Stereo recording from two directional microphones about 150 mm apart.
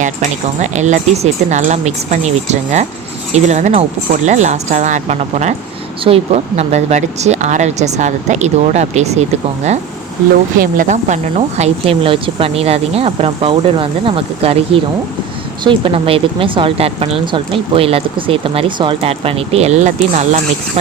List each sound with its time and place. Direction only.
0.0 s speech: 50° right (ahead or behind)
10.6 s speech: 60° right (ahead or behind)